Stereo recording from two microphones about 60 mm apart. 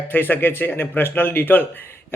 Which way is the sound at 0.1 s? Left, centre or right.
Left.